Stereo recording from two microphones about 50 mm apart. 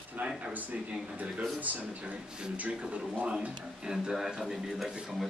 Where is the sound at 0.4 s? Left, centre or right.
Right.